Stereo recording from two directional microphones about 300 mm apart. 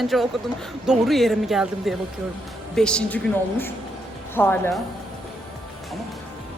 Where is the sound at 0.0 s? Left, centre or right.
Centre.